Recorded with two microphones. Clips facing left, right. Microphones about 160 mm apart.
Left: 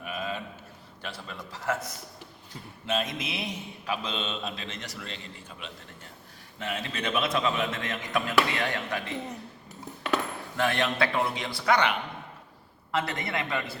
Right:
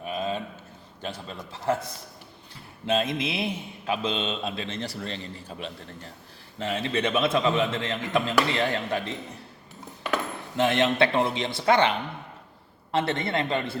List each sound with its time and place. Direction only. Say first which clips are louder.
0.0 s a sound: right 5 dB; 30° right (ahead or behind)
1.3 s mantra: right 4 dB; 30° right (ahead or behind)
6.6 s a man's voice: right 6 dB; 30° right (ahead or behind)
8.4 s mantra: right 4 dB; 30° right (ahead or behind)
10.6 s a man's voice: right 5 dB; 25° right (ahead or behind)